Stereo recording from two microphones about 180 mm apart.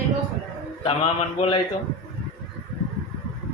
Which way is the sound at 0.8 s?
30° left (ahead or behind).